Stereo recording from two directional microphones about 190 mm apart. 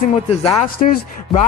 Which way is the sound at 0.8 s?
40° left (ahead or behind).